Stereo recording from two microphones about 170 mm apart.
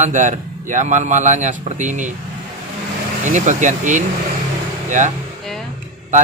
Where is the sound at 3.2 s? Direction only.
45° right (ahead or behind).